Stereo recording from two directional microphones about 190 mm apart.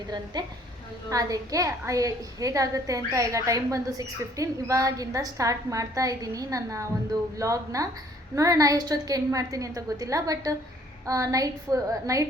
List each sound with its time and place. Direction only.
0.3 s a woman's voice: 20° right (ahead or behind)